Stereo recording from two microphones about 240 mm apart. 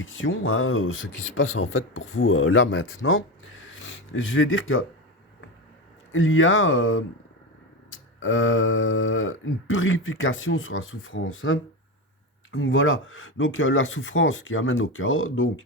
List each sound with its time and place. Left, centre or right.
0.0 s speech: left
6.1 s speech: left